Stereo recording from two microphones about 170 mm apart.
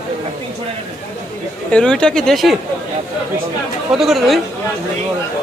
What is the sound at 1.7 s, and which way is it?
Speech, 5° left (ahead or behind).